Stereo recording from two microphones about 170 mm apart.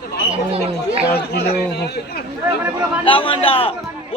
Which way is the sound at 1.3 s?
70° left (ahead or behind).